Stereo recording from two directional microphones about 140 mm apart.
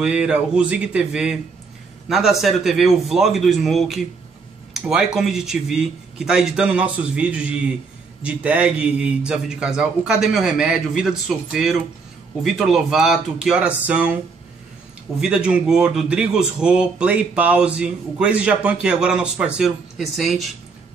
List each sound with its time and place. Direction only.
0.0 s a man's voice: 5° right (ahead or behind)
15.1 s a man's voice: 5° right (ahead or behind)